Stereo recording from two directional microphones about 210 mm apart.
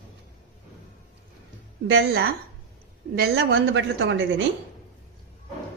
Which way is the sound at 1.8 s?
55° right (ahead or behind).